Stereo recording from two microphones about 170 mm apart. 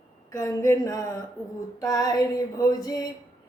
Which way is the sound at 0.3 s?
20° left (ahead or behind).